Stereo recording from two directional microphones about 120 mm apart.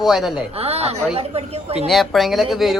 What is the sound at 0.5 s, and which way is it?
A woman's voice, 60° right (ahead or behind).